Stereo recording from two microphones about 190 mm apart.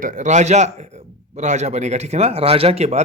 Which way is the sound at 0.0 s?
40° right (ahead or behind).